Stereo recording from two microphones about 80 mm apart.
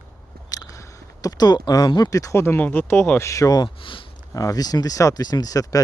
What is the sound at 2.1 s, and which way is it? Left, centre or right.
Speech, left.